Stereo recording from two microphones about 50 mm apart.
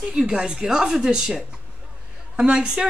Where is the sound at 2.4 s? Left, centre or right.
Centre.